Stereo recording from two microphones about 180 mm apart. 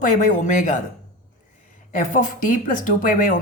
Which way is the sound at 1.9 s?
45° left (ahead or behind).